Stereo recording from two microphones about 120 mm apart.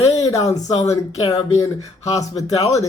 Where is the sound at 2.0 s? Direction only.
60° left (ahead or behind).